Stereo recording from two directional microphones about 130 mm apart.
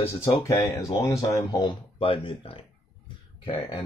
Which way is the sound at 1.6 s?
45° left (ahead or behind).